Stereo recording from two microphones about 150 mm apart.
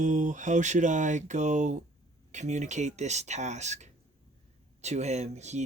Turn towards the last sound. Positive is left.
turn(degrees=-50)  # may be behind; listen again after turning